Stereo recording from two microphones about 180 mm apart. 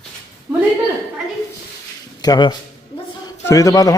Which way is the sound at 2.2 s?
25° left (ahead or behind).